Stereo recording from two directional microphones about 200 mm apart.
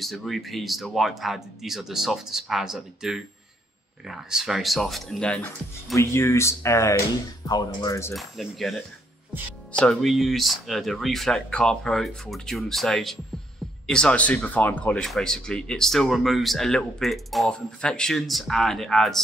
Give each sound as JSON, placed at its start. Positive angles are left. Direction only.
{"t": 0.0, "sound": "speech", "side_deg": 0}
{"t": 8.1, "sound": "speech", "side_deg": 0}